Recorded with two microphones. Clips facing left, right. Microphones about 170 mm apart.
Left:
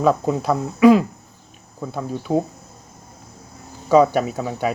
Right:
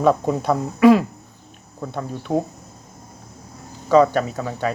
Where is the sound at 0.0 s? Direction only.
Centre (ahead or behind).